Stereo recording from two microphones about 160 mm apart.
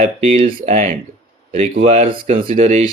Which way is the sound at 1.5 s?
40° right (ahead or behind).